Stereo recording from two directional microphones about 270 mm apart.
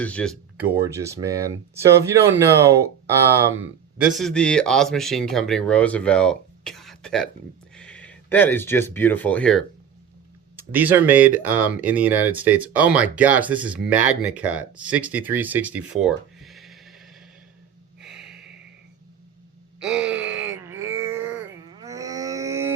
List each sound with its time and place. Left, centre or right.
0.0 s speech: centre
10.6 s speech: centre
18.0 s snort: centre
19.8 s groan: centre
20.7 s a sound: right
21.6 s livestock: centre